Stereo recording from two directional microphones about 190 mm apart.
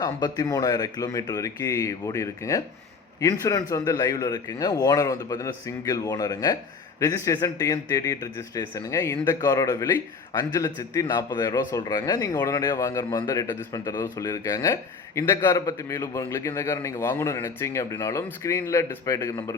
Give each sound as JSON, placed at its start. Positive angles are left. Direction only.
{"t": 0.0, "sound": "a man's voice", "side_deg": 20}